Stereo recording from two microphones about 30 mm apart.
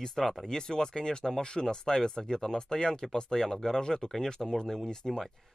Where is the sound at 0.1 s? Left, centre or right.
Centre.